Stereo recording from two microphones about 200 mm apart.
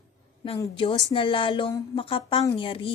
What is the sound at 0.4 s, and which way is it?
A woman's voice, 20° left (ahead or behind).